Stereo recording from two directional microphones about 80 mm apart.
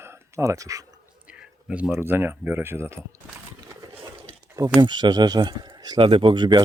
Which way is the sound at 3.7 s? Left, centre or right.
Right.